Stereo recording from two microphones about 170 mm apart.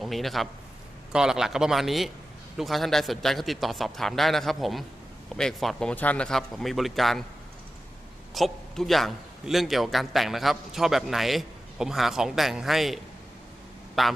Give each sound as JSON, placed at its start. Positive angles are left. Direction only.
{"t": 0.0, "sound": "a man's voice", "side_deg": 0}
{"t": 8.4, "sound": "a man's voice", "side_deg": 0}
{"t": 14.0, "sound": "a man's voice", "side_deg": 0}